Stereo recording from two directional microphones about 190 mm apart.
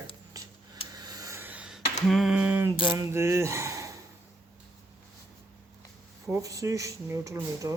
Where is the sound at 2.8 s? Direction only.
15° right (ahead or behind).